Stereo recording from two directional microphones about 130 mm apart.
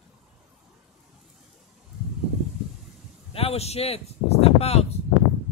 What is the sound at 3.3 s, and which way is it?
Speech, 50° left (ahead or behind).